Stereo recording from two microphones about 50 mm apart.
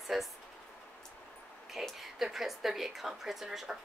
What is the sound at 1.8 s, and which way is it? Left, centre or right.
Speech, centre.